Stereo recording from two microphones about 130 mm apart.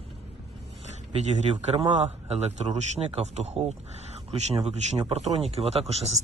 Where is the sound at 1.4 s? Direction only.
55° right (ahead or behind).